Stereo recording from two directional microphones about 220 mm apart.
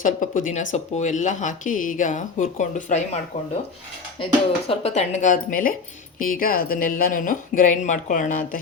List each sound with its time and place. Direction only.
0.0 s speech: 35° left (ahead or behind)
4.7 s speech: 30° left (ahead or behind)